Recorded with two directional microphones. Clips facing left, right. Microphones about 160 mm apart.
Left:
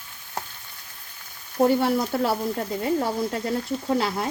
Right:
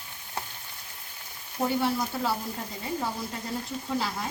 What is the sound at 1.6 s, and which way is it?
Speech, 60° left (ahead or behind).